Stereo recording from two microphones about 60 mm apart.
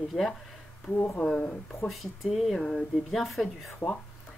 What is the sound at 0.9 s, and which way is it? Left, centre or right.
Speech, left.